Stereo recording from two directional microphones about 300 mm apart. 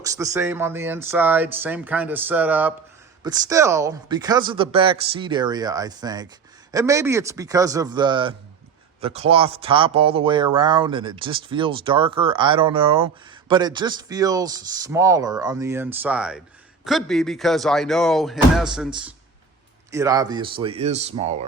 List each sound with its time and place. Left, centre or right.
0.0 s speech: centre